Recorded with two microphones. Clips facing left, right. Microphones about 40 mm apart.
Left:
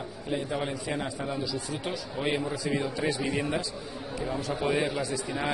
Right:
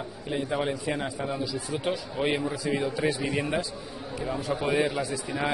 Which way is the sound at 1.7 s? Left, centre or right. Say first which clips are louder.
Right 4 dB; right.